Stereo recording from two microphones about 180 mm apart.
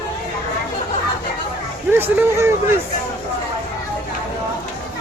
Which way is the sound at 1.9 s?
10° right (ahead or behind).